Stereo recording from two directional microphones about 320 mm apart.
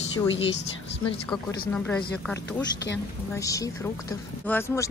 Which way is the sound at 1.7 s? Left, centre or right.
Centre.